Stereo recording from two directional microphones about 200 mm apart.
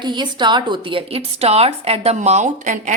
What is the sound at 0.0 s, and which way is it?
A woman's voice, 20° right (ahead or behind).